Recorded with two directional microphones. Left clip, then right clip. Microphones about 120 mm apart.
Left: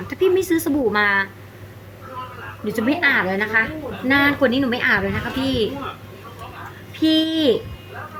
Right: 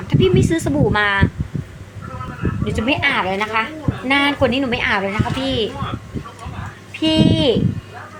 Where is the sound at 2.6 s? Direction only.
15° left (ahead or behind).